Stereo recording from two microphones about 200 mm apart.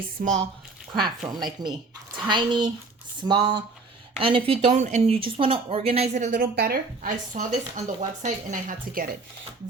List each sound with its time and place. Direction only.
0.2 s speech: 45° right (ahead or behind)
1.2 s speech: centre (ahead or behind)
2.1 s speech: 25° right (ahead or behind); by 9.0 s 40° right (ahead or behind)